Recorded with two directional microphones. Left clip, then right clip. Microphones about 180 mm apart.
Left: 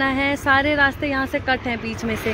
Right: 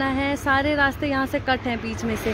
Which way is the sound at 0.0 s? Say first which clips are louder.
Left 3 dB; 5° right (ahead or behind).